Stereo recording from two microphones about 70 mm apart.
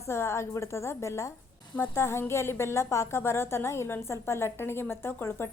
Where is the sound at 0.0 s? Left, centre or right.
Left.